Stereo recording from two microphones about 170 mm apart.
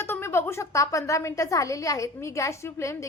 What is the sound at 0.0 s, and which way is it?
A woman's voice, 15° left (ahead or behind).